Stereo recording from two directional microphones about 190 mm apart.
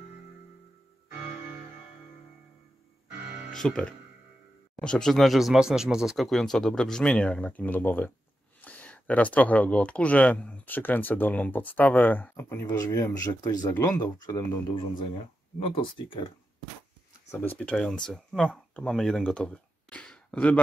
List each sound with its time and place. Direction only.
3.5 s speech: 5° left (ahead or behind); by 14.4 s 20° left (ahead or behind)
15.6 s speech: 30° left (ahead or behind)
17.3 s speech: 10° left (ahead or behind)